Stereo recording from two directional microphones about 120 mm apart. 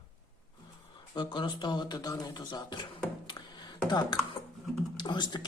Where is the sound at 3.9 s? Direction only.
35° left (ahead or behind).